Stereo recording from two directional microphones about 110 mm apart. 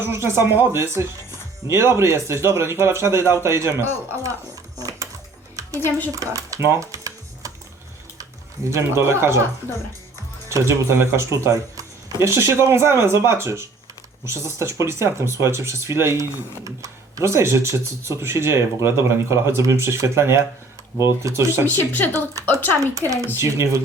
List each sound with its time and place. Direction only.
0.0 s speech: 25° right (ahead or behind)
4.8 s a sound: 30° right (ahead or behind)
6.1 s typing: 30° right (ahead or behind)
8.7 s speech: 25° right (ahead or behind)
10.5 s speech: 25° right (ahead or behind)